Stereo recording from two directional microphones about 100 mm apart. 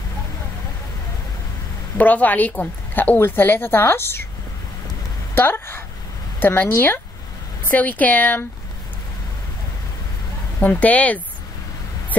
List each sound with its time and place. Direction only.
2.0 s a woman's voice: 15° left (ahead or behind)
5.3 s a woman's voice: 20° left (ahead or behind)
10.6 s speech: 15° left (ahead or behind)